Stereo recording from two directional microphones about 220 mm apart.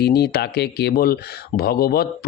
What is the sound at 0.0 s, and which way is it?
Speech, 45° left (ahead or behind).